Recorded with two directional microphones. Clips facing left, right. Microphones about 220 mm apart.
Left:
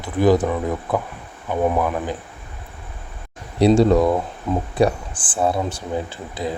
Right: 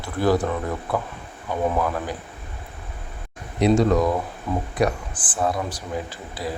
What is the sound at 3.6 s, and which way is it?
Speech, 30° left (ahead or behind).